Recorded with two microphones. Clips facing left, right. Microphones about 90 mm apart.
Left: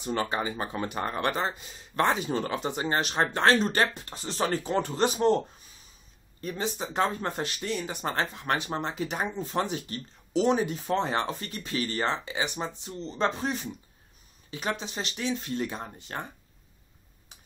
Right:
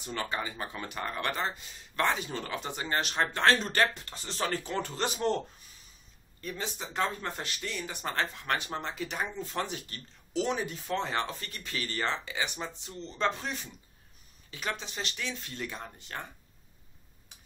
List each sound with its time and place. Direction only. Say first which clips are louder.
0.1 s speech: left 5 dB; 25° left (ahead or behind)
6.4 s speech: left 6 dB; 25° left (ahead or behind)
13.2 s speech: left 3 dB; 30° left (ahead or behind)